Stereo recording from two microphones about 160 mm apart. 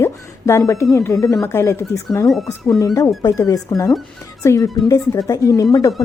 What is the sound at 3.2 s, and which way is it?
A woman's voice, 20° left (ahead or behind).